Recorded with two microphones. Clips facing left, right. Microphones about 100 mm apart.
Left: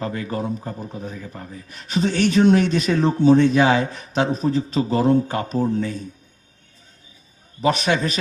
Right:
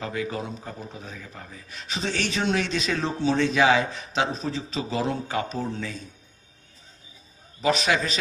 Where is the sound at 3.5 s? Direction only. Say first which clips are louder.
Left 3 dB; 45° left (ahead or behind).